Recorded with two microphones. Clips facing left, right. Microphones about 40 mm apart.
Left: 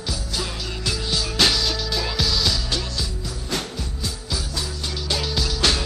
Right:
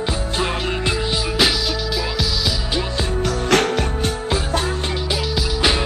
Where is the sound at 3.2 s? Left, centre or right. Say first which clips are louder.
Right 12 dB; right.